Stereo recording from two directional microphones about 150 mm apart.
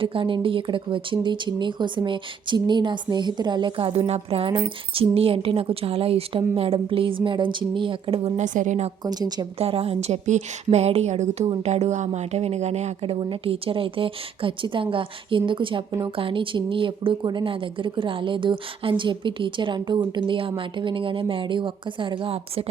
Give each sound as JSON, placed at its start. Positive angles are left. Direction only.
{"t": 0.0, "sound": "speech", "side_deg": -35}
{"t": 8.4, "sound": "a woman's voice", "side_deg": -55}
{"t": 9.0, "sound": "a woman's voice", "side_deg": -25}
{"t": 9.6, "sound": "a woman's voice", "side_deg": -40}